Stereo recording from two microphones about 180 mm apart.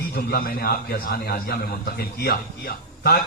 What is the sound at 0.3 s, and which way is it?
A man's voice, 55° left (ahead or behind).